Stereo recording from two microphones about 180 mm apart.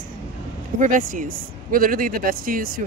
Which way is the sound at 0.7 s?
50° right (ahead or behind).